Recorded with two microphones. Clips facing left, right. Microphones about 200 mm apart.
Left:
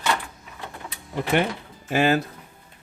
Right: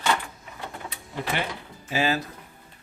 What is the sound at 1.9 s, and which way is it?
Speech, 55° left (ahead or behind).